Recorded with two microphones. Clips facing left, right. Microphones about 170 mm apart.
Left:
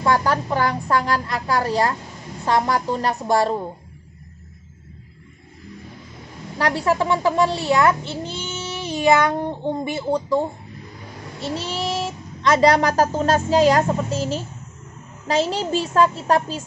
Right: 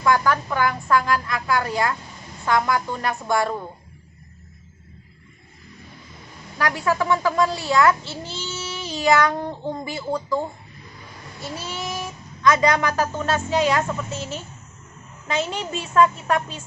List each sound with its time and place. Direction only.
0.0 s a woman's voice: 30° left (ahead or behind)
6.6 s a child's voice: 30° left (ahead or behind)